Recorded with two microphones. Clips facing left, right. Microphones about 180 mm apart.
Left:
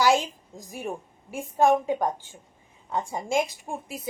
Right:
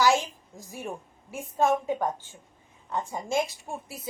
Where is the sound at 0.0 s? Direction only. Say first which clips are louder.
Left 1 dB; 15° left (ahead or behind).